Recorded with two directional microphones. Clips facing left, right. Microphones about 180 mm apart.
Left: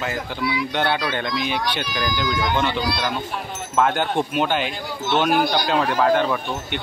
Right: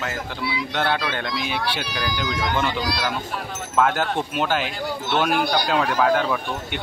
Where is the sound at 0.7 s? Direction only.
Centre (ahead or behind).